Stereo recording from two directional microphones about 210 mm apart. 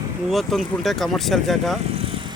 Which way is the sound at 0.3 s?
Centre (ahead or behind).